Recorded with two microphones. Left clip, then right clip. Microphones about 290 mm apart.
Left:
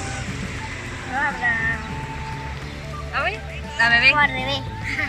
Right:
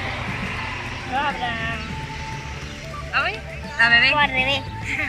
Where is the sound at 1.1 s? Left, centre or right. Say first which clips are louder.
Left 2 dB; centre.